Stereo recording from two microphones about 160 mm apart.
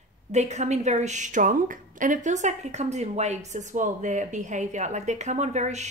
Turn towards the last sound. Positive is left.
turn(degrees=-45)  # may be behind; listen again after turning